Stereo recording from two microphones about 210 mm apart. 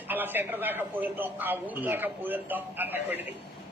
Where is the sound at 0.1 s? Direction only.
10° right (ahead or behind).